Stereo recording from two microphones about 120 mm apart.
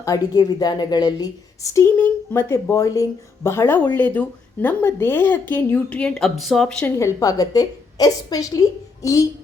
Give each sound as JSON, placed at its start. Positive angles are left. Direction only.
{"t": 0.0, "sound": "a woman's voice", "side_deg": 30}
{"t": 6.8, "sound": "a woman's voice", "side_deg": 25}